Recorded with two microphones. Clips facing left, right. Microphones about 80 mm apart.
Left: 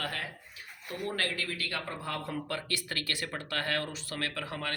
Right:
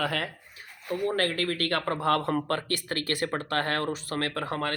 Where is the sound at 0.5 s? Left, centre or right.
Right.